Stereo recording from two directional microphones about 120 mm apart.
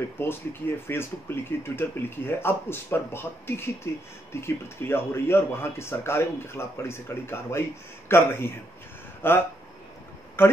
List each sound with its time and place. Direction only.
0.2 s speech: 20° left (ahead or behind)